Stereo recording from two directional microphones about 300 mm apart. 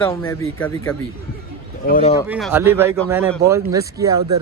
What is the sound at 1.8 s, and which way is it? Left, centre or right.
Speech, left.